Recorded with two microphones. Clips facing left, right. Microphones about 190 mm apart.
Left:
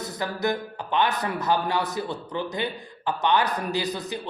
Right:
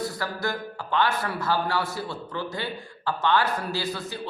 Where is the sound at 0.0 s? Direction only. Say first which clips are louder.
Left 2 dB; 20° left (ahead or behind).